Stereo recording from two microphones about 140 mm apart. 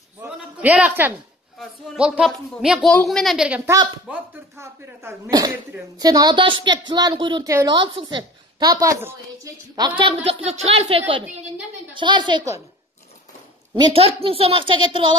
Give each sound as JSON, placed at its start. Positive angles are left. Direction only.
{"t": 0.2, "sound": "a sound", "side_deg": -10}
{"t": 1.6, "sound": "speech", "side_deg": -5}
{"t": 3.4, "sound": "speech", "side_deg": -10}
{"t": 3.7, "sound": "a woman's voice", "side_deg": -30}
{"t": 4.1, "sound": "a woman's voice", "side_deg": -15}
{"t": 13.7, "sound": "a woman's voice", "side_deg": -40}